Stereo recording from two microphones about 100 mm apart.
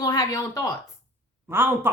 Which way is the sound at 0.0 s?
40° left (ahead or behind).